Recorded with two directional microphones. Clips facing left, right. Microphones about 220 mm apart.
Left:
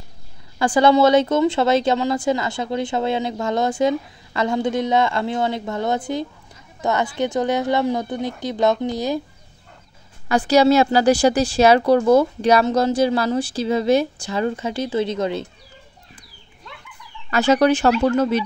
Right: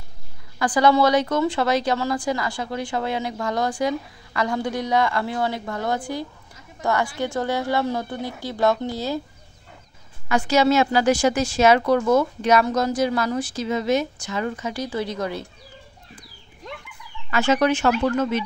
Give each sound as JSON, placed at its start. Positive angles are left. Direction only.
{"t": 0.6, "sound": "speech", "side_deg": 25}
{"t": 10.2, "sound": "a woman's voice", "side_deg": 35}
{"t": 17.3, "sound": "a woman's voice", "side_deg": 35}